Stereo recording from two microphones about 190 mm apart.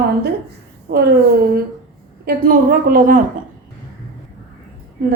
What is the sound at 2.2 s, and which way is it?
A woman's voice, 50° right (ahead or behind).